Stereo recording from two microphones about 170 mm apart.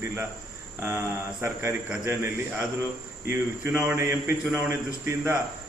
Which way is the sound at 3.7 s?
15° right (ahead or behind).